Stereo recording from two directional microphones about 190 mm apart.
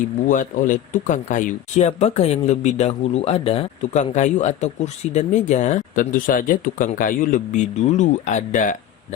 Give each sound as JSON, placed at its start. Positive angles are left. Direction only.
{"t": 0.3, "sound": "speech", "side_deg": 45}